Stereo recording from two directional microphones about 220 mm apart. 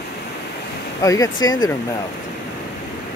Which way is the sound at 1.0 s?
15° left (ahead or behind).